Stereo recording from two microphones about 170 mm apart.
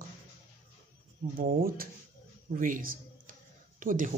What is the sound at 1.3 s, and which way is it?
A man's voice, 60° right (ahead or behind).